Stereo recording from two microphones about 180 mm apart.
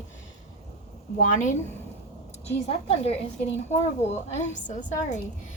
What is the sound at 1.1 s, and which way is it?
Speech, 45° left (ahead or behind).